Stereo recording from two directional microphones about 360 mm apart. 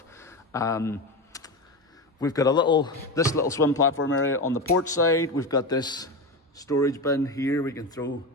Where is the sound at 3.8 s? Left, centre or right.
Left.